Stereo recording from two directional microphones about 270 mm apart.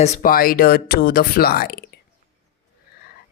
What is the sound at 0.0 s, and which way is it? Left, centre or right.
Speech, left.